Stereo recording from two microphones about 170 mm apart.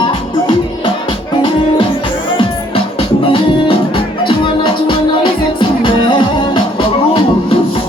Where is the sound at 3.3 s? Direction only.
30° left (ahead or behind).